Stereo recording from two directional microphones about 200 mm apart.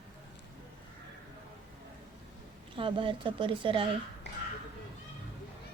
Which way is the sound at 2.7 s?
25° right (ahead or behind).